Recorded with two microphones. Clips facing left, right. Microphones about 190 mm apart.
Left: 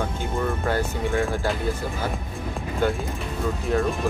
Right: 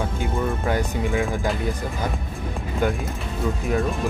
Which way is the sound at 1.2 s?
15° right (ahead or behind).